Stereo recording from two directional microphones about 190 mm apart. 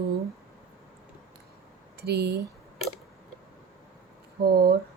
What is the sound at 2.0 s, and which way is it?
Speech, 60° right (ahead or behind).